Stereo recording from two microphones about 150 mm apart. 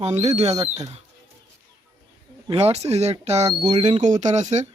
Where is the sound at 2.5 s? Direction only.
45° right (ahead or behind).